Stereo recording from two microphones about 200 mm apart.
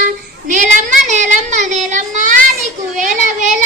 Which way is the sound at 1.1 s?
35° right (ahead or behind).